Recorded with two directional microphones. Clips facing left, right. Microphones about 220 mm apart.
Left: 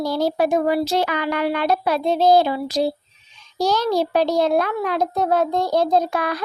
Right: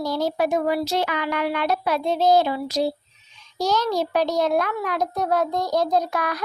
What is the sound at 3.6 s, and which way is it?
Child singing, 30° left (ahead or behind).